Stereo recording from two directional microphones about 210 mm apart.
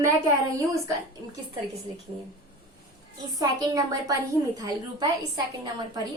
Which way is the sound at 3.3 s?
15° right (ahead or behind).